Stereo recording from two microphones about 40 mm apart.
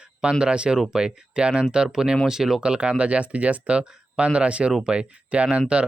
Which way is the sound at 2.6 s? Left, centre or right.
Right.